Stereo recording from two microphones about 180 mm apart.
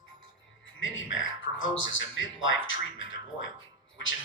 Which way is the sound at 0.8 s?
90° left.